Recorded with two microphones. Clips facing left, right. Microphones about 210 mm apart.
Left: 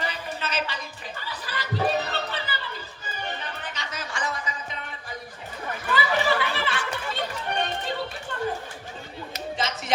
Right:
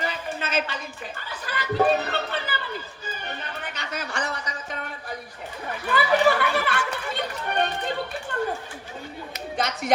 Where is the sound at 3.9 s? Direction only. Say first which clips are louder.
Right 2 dB; 60° right (ahead or behind).